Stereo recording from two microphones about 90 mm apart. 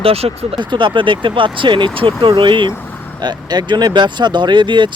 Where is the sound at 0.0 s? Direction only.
90° right; by 2.7 s 60° right (ahead or behind).